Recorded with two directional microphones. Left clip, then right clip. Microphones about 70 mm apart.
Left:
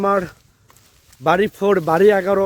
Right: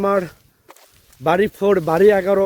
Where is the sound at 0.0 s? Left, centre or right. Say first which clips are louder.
Even; right.